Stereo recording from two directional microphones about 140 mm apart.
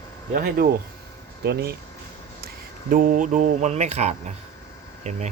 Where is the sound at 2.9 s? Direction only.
75° right (ahead or behind); by 5.2 s 55° right (ahead or behind).